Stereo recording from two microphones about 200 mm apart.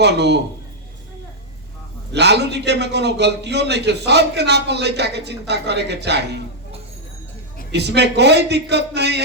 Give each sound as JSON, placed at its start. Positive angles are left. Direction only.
{"t": 0.0, "sound": "a man's voice", "side_deg": -60}
{"t": 2.1, "sound": "a man's voice", "side_deg": -60}
{"t": 7.7, "sound": "a man's voice", "side_deg": -60}